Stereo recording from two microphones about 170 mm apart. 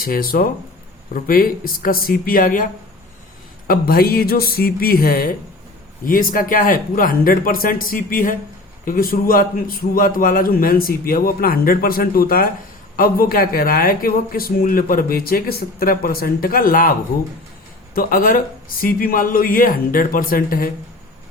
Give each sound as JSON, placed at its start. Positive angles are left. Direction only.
{"t": 0.0, "sound": "speech", "side_deg": 60}
{"t": 3.7, "sound": "speech", "side_deg": 60}
{"t": 17.9, "sound": "speech", "side_deg": 55}